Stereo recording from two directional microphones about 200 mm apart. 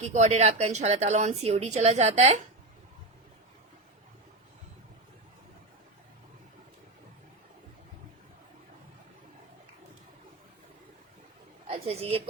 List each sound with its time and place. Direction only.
0.0 s speech: 35° right (ahead or behind)
11.7 s a woman's voice: 30° right (ahead or behind)